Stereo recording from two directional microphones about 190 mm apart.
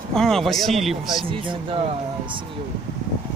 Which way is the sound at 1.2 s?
25° right (ahead or behind).